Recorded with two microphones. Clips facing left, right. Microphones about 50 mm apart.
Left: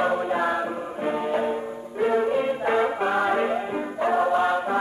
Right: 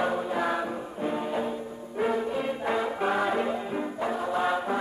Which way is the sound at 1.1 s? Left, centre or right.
Left.